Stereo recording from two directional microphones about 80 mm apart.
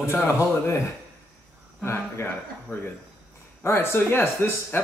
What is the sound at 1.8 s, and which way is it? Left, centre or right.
Speech, left.